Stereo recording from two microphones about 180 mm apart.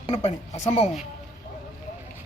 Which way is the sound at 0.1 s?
35° left (ahead or behind).